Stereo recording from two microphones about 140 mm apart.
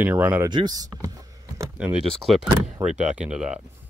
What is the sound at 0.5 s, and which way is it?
Speech, 30° right (ahead or behind).